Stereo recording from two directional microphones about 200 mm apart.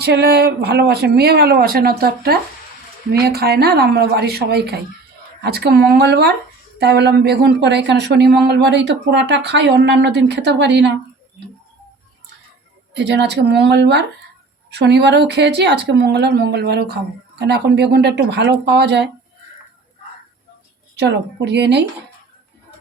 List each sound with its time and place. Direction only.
0.0 s speech: 55° right (ahead or behind)
12.9 s speech: 60° right (ahead or behind)
20.9 s speech: 60° right (ahead or behind)